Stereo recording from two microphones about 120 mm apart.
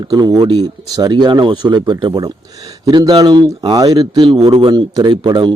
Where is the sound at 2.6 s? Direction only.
30° right (ahead or behind).